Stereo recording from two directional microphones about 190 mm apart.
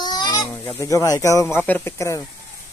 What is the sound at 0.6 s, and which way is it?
Speech, 15° left (ahead or behind).